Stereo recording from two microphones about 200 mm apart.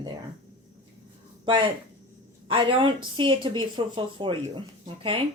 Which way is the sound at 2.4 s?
25° right (ahead or behind).